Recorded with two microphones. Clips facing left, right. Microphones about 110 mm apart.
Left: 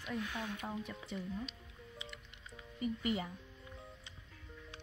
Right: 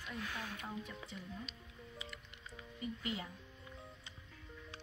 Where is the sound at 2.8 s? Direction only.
15° left (ahead or behind).